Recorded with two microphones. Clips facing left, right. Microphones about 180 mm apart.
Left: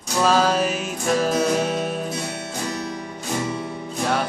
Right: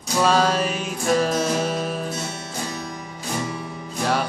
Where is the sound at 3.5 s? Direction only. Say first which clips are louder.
Left 3 dB; 30° left (ahead or behind).